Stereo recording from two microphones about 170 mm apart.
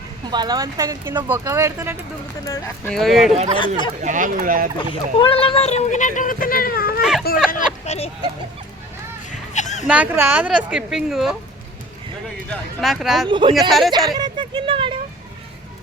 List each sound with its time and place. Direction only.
0.3 s speech: 25° right (ahead or behind)
2.9 s speech: centre (ahead or behind)
3.3 s speech: 40° right (ahead or behind); by 4.7 s 55° right (ahead or behind)
4.8 s speech: 30° left (ahead or behind); by 7.0 s 60° left (ahead or behind)
7.0 s speech: centre (ahead or behind)
7.5 s a sound: 40° left (ahead or behind)
9.3 s a sound: 45° left (ahead or behind)
9.8 s speech: 10° right (ahead or behind)
12.5 s speech: centre (ahead or behind)
13.2 s speech: 30° right (ahead or behind)
13.7 s speech: centre (ahead or behind)
13.9 s speech: 25° right (ahead or behind)